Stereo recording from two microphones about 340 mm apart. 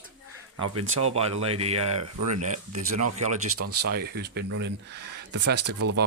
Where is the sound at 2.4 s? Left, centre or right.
Right.